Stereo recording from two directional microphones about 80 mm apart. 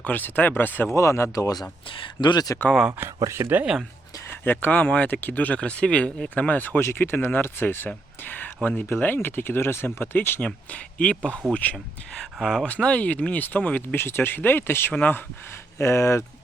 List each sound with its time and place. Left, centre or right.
0.0 s speech: left
0.9 s speech: left
1.9 s speech: left
3.2 s speech: right
4.3 s speech: left
10.4 s speech: centre
12.4 s speech: centre
12.6 s speech: centre
15.8 s speech: left